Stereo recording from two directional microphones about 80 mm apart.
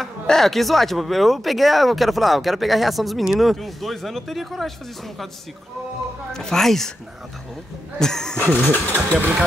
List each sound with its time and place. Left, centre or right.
0.0 s speech: centre
6.3 s speech: centre
8.0 s speech: centre
8.5 s speech: centre